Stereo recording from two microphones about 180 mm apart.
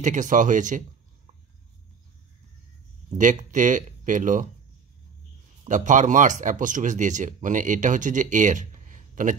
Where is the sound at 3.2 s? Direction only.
45° right (ahead or behind).